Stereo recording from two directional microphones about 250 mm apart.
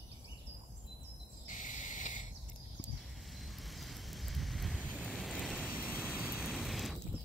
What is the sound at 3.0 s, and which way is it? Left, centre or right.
Vehicle, centre.